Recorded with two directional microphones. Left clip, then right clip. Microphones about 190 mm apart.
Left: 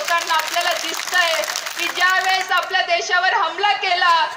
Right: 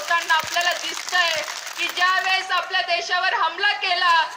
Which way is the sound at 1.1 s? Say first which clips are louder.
Left 2 dB; 25° right (ahead or behind).